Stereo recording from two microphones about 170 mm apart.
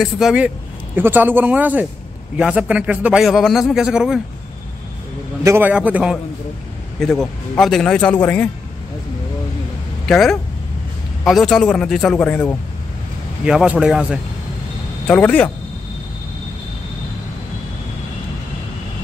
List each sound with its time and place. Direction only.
0.0 s a man's voice: 5° right (ahead or behind)
5.4 s speech: 15° right (ahead or behind)
7.0 s a man's voice: 5° left (ahead or behind)
10.0 s a man's voice: centre (ahead or behind)
13.5 s a man's voice: 5° right (ahead or behind)
15.0 s speech: 10° left (ahead or behind)